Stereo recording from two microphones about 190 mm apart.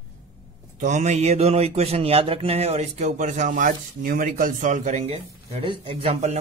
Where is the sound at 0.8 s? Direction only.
40° right (ahead or behind).